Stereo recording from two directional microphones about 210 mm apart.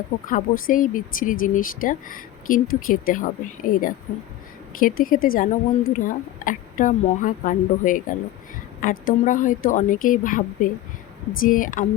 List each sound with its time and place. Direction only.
0.3 s speech: 40° left (ahead or behind)